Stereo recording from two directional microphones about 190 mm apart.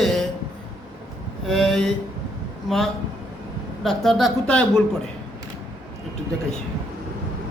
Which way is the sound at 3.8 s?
Centre (ahead or behind).